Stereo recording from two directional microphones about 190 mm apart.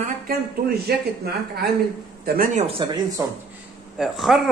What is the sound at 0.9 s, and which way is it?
Speech, 55° right (ahead or behind).